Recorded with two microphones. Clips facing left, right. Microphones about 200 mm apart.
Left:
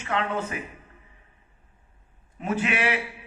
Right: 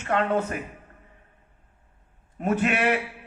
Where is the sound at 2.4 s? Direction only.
55° right (ahead or behind).